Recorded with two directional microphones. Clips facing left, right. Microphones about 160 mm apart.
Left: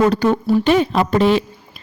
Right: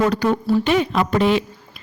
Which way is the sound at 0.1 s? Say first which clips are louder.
Left 3 dB; 30° left (ahead or behind).